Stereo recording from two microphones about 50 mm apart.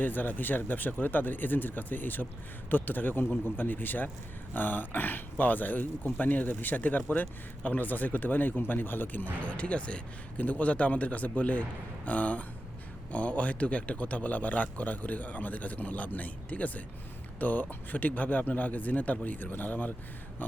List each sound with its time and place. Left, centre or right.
0.0 s speech: left